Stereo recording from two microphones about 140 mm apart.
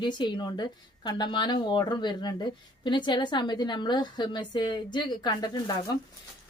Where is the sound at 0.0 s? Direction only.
35° left (ahead or behind).